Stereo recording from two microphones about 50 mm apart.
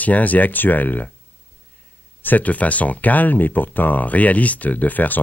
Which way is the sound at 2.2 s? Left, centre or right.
Left.